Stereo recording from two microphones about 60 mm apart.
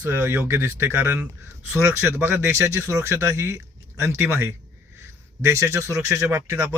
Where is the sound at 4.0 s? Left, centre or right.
Right.